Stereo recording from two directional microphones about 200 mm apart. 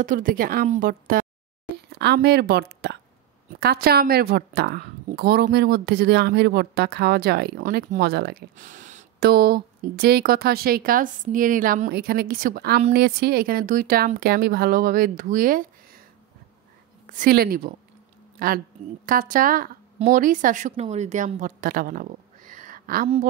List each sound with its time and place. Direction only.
0.0 s a woman's voice: 45° right (ahead or behind)
1.9 s a woman's voice: 55° right (ahead or behind)
17.1 s a woman's voice: 45° right (ahead or behind)
19.0 s a woman's voice: 45° right (ahead or behind)